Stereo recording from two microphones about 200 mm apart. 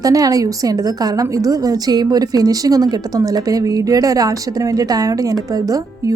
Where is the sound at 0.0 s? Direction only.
15° right (ahead or behind).